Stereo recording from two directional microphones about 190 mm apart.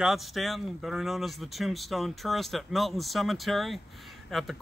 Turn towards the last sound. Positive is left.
turn(degrees=0)  # may be behind; listen again after turning